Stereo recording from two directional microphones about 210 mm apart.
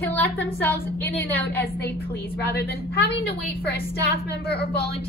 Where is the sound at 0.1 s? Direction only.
10° left (ahead or behind).